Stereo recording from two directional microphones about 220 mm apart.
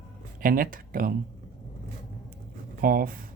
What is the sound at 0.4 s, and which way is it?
Speech, 40° right (ahead or behind).